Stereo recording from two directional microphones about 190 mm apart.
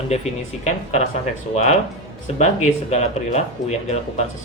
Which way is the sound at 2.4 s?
35° left (ahead or behind).